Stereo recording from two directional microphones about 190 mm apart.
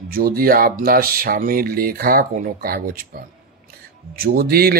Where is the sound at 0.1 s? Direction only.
50° right (ahead or behind).